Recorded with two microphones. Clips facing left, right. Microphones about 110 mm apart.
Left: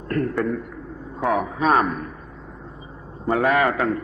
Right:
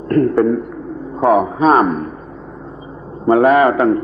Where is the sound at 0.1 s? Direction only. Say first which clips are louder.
Right 10 dB; 30° right (ahead or behind).